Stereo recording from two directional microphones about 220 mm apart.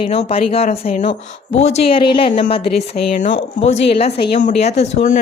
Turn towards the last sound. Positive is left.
turn(degrees=30)  # may be behind; listen again after turning